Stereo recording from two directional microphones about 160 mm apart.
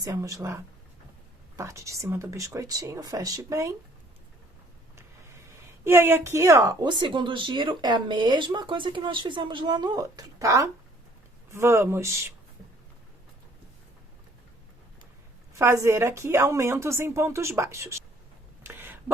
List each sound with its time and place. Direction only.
0.0 s a woman's voice: 20° right (ahead or behind)
5.8 s a woman's voice: 15° right (ahead or behind)
15.5 s a woman's voice: 15° right (ahead or behind)
18.6 s a sound: 15° right (ahead or behind)